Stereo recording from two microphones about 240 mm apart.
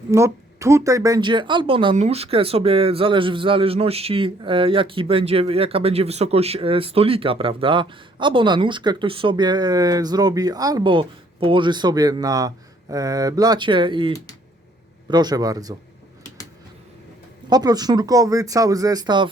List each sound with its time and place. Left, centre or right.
0.1 s speech: centre
15.1 s speech: centre
17.5 s speech: centre